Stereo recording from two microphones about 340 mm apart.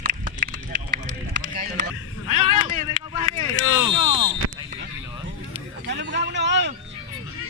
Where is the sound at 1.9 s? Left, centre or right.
Left.